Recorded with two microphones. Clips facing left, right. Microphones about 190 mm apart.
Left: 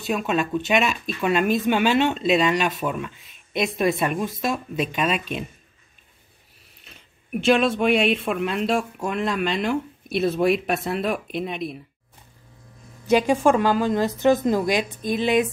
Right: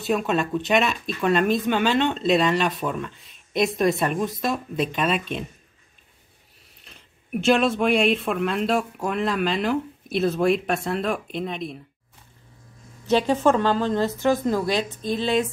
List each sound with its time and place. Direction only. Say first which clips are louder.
0.0 s speech: right 1 dB; centre (ahead or behind)
6.8 s speech: left 1 dB; centre (ahead or behind)
13.0 s a woman's voice: left 1 dB; 10° left (ahead or behind)